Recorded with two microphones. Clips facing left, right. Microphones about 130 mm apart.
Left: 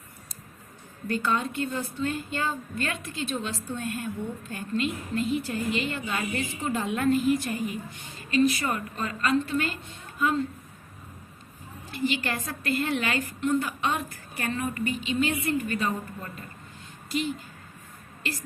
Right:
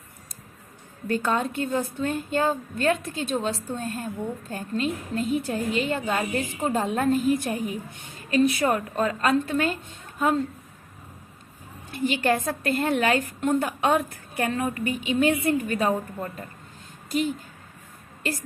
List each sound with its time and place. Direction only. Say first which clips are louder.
1.1 s a woman's voice: right 3 dB; 45° right (ahead or behind)
11.9 s a woman's voice: right 5 dB; 50° right (ahead or behind)
17.1 s a woman's voice: right 4 dB; 50° right (ahead or behind)